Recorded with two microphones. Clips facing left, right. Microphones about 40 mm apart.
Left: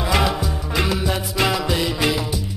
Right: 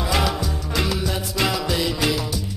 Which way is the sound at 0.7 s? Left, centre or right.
Centre.